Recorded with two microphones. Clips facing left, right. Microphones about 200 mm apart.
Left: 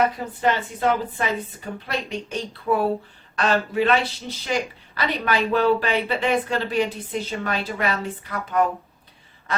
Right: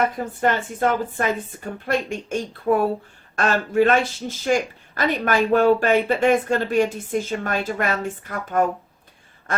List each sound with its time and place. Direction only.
0.4 s speech: 50° right (ahead or behind)
9.5 s quack: 50° right (ahead or behind)